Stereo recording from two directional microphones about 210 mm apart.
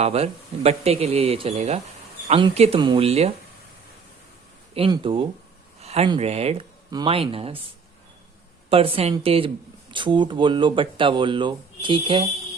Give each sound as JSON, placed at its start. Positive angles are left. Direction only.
{"t": 0.0, "sound": "speech", "side_deg": -30}
{"t": 4.7, "sound": "speech", "side_deg": -25}
{"t": 8.7, "sound": "speech", "side_deg": -25}